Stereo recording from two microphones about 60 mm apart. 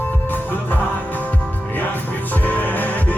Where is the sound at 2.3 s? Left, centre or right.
Left.